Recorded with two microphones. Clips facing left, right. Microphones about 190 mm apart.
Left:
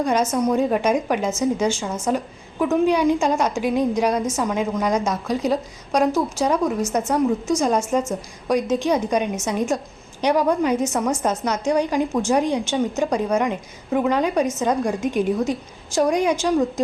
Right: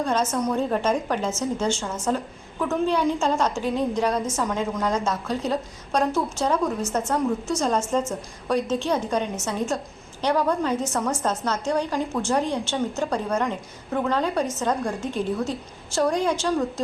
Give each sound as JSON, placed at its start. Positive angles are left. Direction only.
{"t": 0.0, "sound": "a woman's voice", "side_deg": 15}